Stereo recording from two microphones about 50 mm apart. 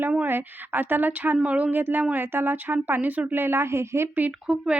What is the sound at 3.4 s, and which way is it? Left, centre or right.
Speech, right.